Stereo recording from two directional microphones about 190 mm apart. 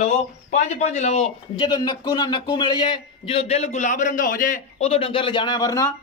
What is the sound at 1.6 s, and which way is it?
Speech, 20° left (ahead or behind).